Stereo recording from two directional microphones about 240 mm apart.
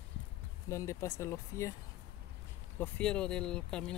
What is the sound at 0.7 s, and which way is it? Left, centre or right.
Speech, centre.